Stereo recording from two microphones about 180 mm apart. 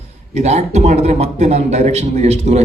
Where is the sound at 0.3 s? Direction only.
40° right (ahead or behind).